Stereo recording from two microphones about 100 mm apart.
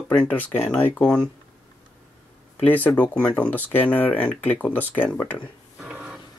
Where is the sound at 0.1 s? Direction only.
15° left (ahead or behind).